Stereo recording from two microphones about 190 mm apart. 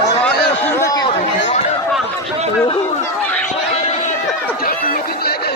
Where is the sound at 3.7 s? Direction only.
35° left (ahead or behind).